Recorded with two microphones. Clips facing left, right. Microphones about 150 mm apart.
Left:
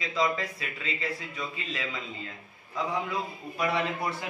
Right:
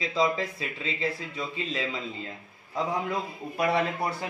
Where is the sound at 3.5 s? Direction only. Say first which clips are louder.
Right 3 dB; 45° right (ahead or behind).